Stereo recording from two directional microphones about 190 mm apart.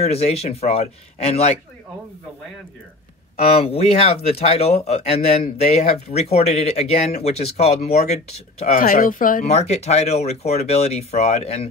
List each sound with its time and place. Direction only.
0.0 s speech: 35° left (ahead or behind)
3.3 s speech: 30° left (ahead or behind)
8.7 s speech: 50° left (ahead or behind)